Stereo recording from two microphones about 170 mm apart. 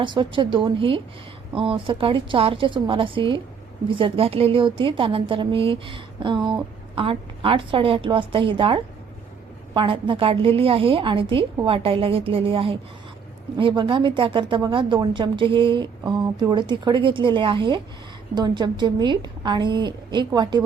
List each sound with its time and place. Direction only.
0.0 s a woman's voice: 30° right (ahead or behind)